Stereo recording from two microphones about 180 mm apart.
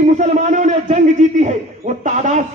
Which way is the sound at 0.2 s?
45° right (ahead or behind).